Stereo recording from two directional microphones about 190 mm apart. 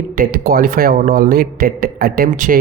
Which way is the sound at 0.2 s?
50° right (ahead or behind).